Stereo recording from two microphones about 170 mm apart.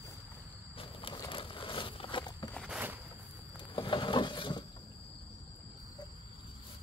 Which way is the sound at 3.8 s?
30° left (ahead or behind).